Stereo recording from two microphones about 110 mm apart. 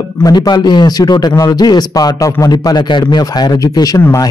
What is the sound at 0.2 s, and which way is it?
Speech, 40° left (ahead or behind).